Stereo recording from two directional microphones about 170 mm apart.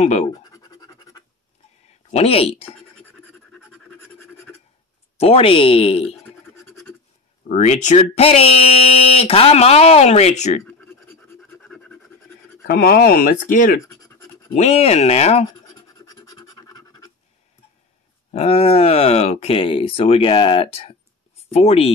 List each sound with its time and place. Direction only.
0.0 s speech: 40° left (ahead or behind)
0.4 s scratch: 20° left (ahead or behind)
2.0 s speech: 35° left (ahead or behind)
4.0 s scratch: 15° left (ahead or behind)
5.1 s speech: 35° left (ahead or behind)
6.0 s scratch: 15° left (ahead or behind)
7.4 s speech: 45° left (ahead or behind)
10.7 s scratch: 10° left (ahead or behind)
12.6 s speech: 65° left (ahead or behind)
13.8 s scratch: 20° left (ahead or behind)
14.5 s speech: 40° left (ahead or behind)
16.1 s scratch: 20° left (ahead or behind)
18.3 s speech: 35° left (ahead or behind)